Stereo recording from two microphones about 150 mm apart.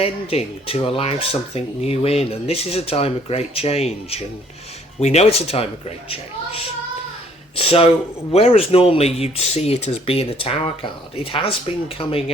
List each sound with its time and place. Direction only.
0.0 s speech: 40° left (ahead or behind)
7.5 s a sound: 40° left (ahead or behind)
8.3 s speech: 40° left (ahead or behind)